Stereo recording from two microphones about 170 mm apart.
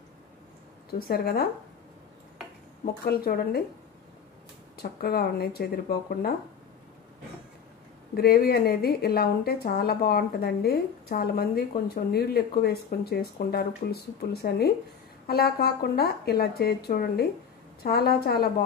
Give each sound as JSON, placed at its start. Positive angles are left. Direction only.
{"t": 0.9, "sound": "speech", "side_deg": 65}
{"t": 2.8, "sound": "speech", "side_deg": 60}
{"t": 4.7, "sound": "speech", "side_deg": 65}
{"t": 8.1, "sound": "a woman's voice", "side_deg": 65}